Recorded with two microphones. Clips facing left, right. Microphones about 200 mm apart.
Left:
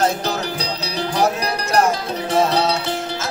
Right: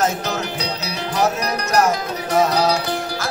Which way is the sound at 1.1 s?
30° left (ahead or behind).